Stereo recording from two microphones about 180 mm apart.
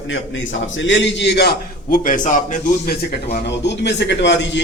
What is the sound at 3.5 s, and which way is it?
A man's voice, 70° left (ahead or behind).